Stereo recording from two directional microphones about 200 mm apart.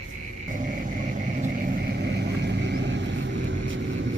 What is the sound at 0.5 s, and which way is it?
Vehicle, 40° right (ahead or behind).